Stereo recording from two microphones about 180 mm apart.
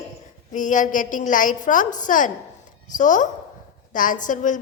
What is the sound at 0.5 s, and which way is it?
A woman's voice, 45° left (ahead or behind).